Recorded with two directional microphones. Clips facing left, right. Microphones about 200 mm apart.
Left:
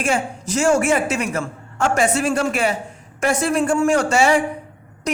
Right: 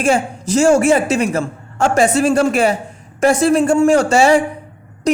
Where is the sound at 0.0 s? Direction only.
30° right (ahead or behind).